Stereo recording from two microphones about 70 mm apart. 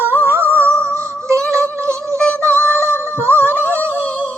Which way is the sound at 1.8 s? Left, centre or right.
Right.